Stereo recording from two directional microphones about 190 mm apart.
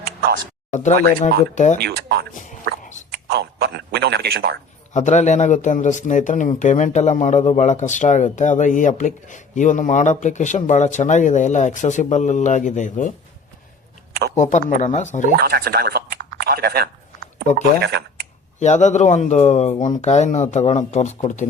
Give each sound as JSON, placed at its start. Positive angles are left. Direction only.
{"t": 0.0, "sound": "a sound", "side_deg": -55}
{"t": 0.7, "sound": "speech", "side_deg": 40}
{"t": 1.8, "sound": "speech", "side_deg": -60}
{"t": 3.1, "sound": "a sound", "side_deg": -60}
{"t": 4.9, "sound": "speech", "side_deg": 35}
{"t": 14.1, "sound": "a sound", "side_deg": -60}
{"t": 14.3, "sound": "speech", "side_deg": 40}
{"t": 15.3, "sound": "speech", "side_deg": -55}
{"t": 18.6, "sound": "speech", "side_deg": 40}